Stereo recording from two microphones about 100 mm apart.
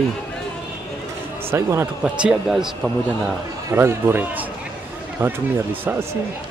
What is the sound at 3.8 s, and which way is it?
Speech, 25° right (ahead or behind).